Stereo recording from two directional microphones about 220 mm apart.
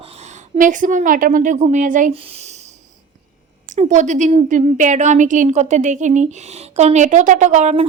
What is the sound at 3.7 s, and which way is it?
A woman's voice, 35° right (ahead or behind).